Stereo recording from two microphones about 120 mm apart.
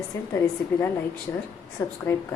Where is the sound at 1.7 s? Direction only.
25° left (ahead or behind).